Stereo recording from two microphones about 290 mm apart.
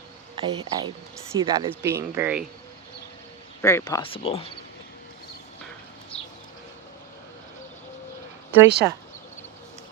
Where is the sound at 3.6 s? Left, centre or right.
Centre.